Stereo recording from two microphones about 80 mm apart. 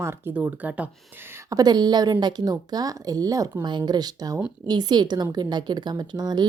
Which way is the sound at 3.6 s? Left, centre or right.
Right.